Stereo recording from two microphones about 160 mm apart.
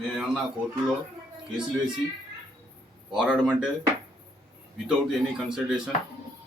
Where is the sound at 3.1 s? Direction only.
5° right (ahead or behind).